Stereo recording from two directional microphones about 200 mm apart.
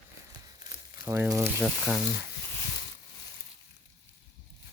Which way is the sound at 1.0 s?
15° right (ahead or behind).